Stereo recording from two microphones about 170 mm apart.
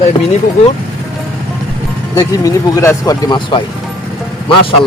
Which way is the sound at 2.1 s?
20° left (ahead or behind).